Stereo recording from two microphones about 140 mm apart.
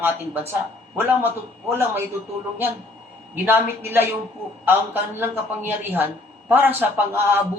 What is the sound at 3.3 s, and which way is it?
A man's voice, 15° right (ahead or behind).